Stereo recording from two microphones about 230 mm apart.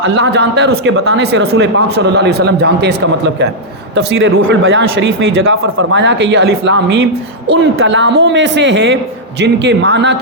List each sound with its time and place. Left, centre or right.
0.0 s speech: right